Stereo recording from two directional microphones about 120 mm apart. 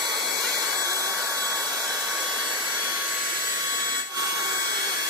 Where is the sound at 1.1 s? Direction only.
25° right (ahead or behind).